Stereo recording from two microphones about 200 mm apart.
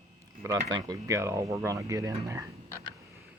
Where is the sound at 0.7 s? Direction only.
15° right (ahead or behind).